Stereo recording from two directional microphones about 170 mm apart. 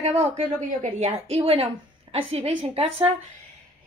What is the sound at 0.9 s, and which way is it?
Speech, 35° right (ahead or behind).